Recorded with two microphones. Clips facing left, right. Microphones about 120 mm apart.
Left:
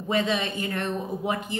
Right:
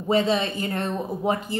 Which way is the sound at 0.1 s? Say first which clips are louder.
Right 4 dB; 35° right (ahead or behind).